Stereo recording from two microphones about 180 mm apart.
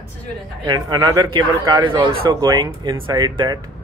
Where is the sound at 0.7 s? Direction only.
20° right (ahead or behind).